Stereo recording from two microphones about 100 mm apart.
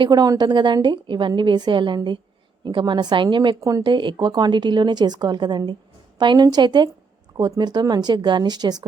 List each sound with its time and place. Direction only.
0.0 s speech: 45° right (ahead or behind)
3.6 s speech: 30° right (ahead or behind)
3.8 s speech: 50° right (ahead or behind)